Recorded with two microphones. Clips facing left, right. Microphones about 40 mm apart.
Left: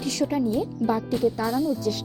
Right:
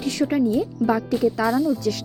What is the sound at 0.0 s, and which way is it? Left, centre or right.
Speech, right.